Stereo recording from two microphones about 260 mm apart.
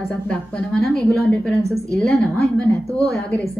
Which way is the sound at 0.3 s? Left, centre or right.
Centre.